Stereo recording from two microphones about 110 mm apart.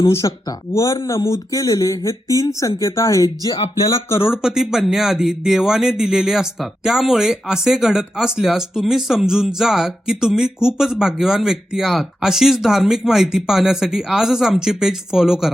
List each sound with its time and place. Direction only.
0.0 s speech: 30° left (ahead or behind)
4.3 s a man's voice: 5° right (ahead or behind)